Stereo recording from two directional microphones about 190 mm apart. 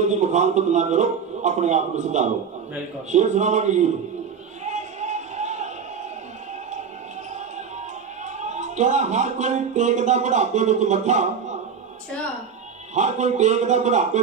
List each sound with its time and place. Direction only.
0.0 s speech: 40° right (ahead or behind)
4.6 s a sound: 40° right (ahead or behind)
8.4 s speech: 40° right (ahead or behind)
12.9 s speech: 40° right (ahead or behind)